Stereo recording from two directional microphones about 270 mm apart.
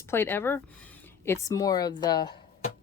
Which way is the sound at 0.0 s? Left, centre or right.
Centre.